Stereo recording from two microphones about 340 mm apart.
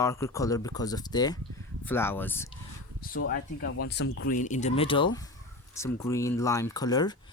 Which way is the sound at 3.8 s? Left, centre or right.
Left.